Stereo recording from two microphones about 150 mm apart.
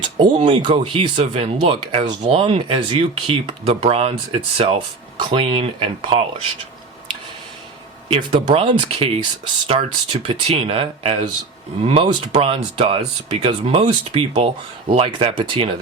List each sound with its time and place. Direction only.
0.2 s speech: 30° right (ahead or behind)
8.0 s speech: 35° right (ahead or behind)